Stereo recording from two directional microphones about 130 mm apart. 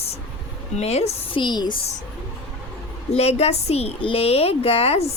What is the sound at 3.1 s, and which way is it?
A woman's voice, 55° left (ahead or behind).